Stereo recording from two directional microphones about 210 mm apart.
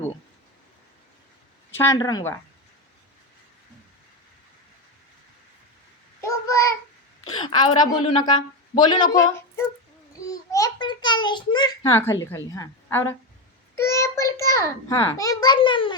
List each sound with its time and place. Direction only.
1.7 s speech: 15° left (ahead or behind)
6.2 s child singing: 15° left (ahead or behind)
7.3 s a woman's voice: 20° left (ahead or behind)